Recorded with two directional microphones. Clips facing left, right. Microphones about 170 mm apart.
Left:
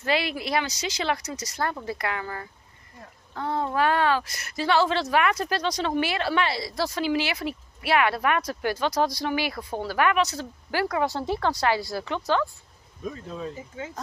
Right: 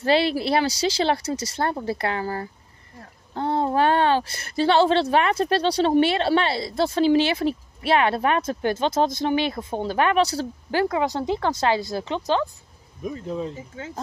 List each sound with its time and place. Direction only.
0.0 s speech: 30° right (ahead or behind)